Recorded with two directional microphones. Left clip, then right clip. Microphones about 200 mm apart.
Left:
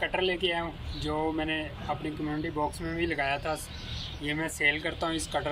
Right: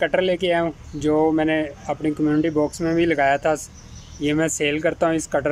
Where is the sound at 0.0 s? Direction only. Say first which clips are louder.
Right 9 dB; 65° right (ahead or behind).